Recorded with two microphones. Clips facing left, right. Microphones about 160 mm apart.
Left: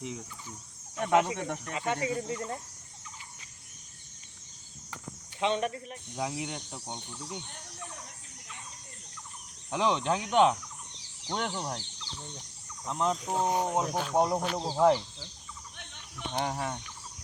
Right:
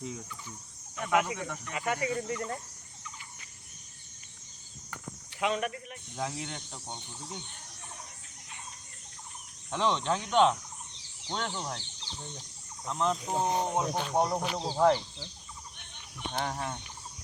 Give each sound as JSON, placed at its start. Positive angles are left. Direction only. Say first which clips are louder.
{"t": 0.9, "sound": "speech", "louder": "left 3 dB", "side_deg": 30}
{"t": 5.4, "sound": "speech", "louder": "left 2 dB", "side_deg": 30}
{"t": 6.1, "sound": "speech", "louder": "left 2 dB", "side_deg": 5}
{"t": 9.7, "sound": "speech", "louder": "left 1 dB", "side_deg": 10}
{"t": 12.8, "sound": "speech", "louder": "even", "side_deg": 15}
{"t": 13.2, "sound": "speech", "louder": "left 1 dB", "side_deg": 0}
{"t": 14.6, "sound": "speech", "louder": "left 1 dB", "side_deg": 10}
{"t": 16.3, "sound": "speech", "louder": "left 2 dB", "side_deg": 10}